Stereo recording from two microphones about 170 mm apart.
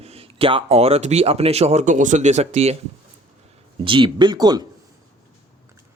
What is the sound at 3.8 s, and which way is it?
Speech, 30° right (ahead or behind).